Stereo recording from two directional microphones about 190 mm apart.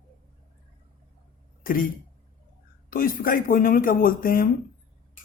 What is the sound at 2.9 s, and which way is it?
Speech, 50° left (ahead or behind).